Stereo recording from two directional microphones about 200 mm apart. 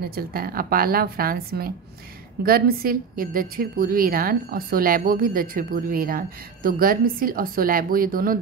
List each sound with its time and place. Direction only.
0.0 s a woman's voice: 50° right (ahead or behind)